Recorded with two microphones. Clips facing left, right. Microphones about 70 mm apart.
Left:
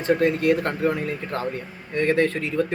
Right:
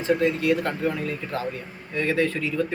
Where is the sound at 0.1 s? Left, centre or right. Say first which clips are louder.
Left 2 dB; left.